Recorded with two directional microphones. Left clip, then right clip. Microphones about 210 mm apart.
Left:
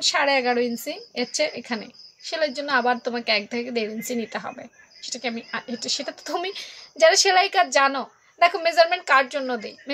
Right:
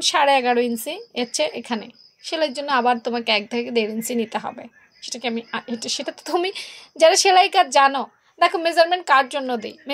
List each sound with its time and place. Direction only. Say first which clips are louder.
0.0 s a woman's voice: right 3 dB; 35° right (ahead or behind)